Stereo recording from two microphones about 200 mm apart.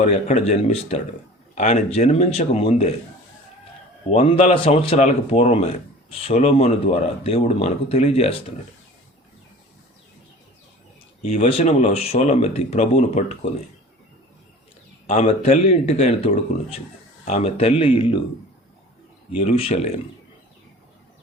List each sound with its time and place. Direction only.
0.0 s speech: 35° left (ahead or behind)
4.1 s speech: 30° left (ahead or behind)
11.3 s speech: 35° left (ahead or behind)
15.1 s speech: 35° left (ahead or behind)
19.4 s speech: 30° left (ahead or behind)